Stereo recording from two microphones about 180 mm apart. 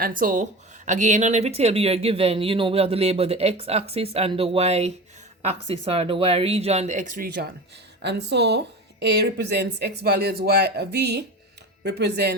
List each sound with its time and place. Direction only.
0.0 s speech: 50° right (ahead or behind)
8.0 s speech: 70° right (ahead or behind)